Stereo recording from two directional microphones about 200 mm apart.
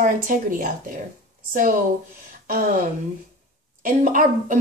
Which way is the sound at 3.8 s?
40° right (ahead or behind).